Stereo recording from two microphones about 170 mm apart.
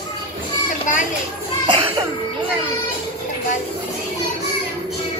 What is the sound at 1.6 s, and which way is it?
Cough, 30° right (ahead or behind).